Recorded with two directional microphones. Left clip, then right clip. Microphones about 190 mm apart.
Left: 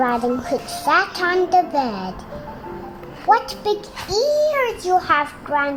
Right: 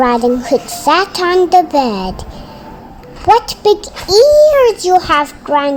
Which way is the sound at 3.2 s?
35° right (ahead or behind).